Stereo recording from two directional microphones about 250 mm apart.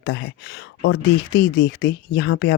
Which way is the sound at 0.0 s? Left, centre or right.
Left.